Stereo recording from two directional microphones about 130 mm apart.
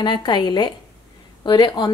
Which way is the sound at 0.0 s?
35° left (ahead or behind).